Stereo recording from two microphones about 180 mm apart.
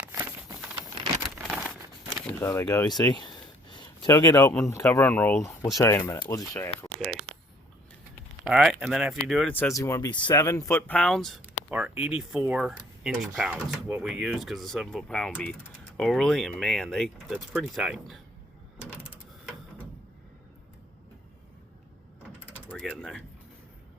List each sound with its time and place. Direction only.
0.0 s a sound: 10° right (ahead or behind)
1.5 s crumpling: centre (ahead or behind)
2.5 s speech: 20° left (ahead or behind)
3.2 s a sound: 25° left (ahead or behind)
4.5 s speech: 15° left (ahead or behind)
8.4 s speech: 5° right (ahead or behind)
9.5 s speech: 10° left (ahead or behind)
11.7 s speech: 10° right (ahead or behind)
18.8 s a sound: 10° right (ahead or behind)
22.7 s speech: centre (ahead or behind)